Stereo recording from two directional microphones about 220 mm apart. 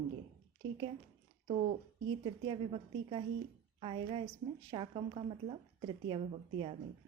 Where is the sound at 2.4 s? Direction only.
25° right (ahead or behind).